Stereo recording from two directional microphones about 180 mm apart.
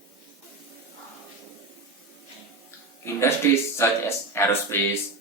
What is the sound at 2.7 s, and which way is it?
Speech, 15° left (ahead or behind).